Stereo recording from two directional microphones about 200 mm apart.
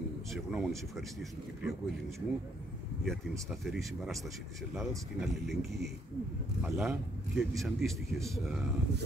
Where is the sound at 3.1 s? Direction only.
Centre (ahead or behind).